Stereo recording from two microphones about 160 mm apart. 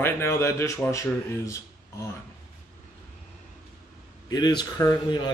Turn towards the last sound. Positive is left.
turn(degrees=25)  # may be behind; listen again after turning